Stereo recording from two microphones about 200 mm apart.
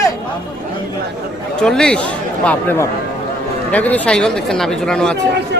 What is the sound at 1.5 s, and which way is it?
Speech, 5° left (ahead or behind).